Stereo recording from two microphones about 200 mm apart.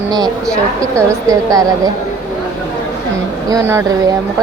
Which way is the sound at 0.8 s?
15° right (ahead or behind).